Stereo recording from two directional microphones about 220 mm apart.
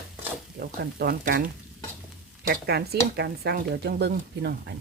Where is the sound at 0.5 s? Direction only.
45° right (ahead or behind).